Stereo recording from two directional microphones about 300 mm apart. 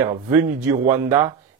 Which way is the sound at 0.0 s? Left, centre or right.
Centre.